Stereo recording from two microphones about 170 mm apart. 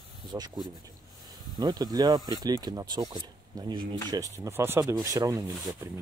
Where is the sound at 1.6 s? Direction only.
25° right (ahead or behind).